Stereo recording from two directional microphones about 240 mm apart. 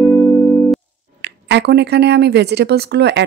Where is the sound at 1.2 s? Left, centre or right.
Right.